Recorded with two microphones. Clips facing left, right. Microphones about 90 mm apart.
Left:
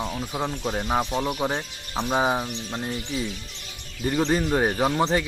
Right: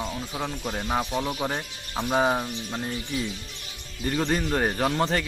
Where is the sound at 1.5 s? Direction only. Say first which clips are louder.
Left 2 dB; 20° left (ahead or behind).